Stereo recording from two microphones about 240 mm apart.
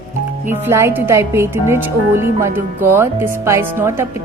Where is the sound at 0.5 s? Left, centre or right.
Centre.